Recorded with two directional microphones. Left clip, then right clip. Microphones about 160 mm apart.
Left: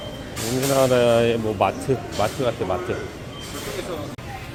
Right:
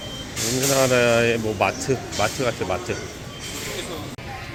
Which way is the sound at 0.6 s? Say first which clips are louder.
Left 1 dB; centre (ahead or behind).